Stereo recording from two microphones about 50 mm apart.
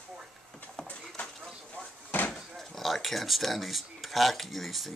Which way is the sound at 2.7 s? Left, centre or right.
Centre.